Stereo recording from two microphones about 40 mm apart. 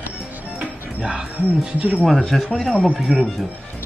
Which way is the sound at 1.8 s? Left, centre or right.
Right.